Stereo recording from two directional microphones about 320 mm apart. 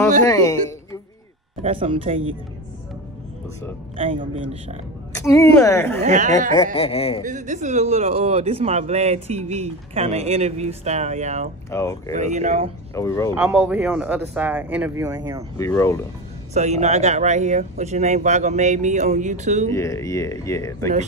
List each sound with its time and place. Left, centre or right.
0.3 s speech: centre
1.6 s speech: centre
3.9 s speech: centre
5.1 s speech: centre
6.0 s speech: right
6.5 s speech: centre
7.2 s speech: right
11.7 s speech: centre
12.1 s speech: right
12.9 s speech: centre
13.3 s speech: centre
15.5 s speech: centre
16.5 s speech: right
19.7 s speech: centre